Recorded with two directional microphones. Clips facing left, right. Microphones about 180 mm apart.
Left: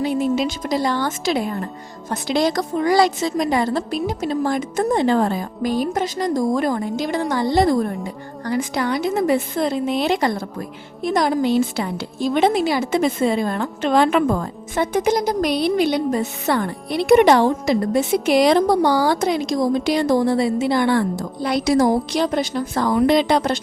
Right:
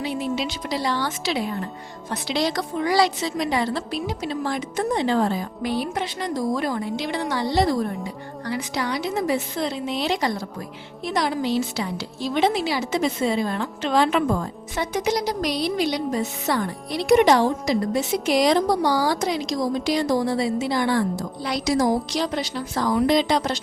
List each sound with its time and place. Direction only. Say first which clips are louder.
0.0 s a woman's voice: left 6 dB; 45° left (ahead or behind)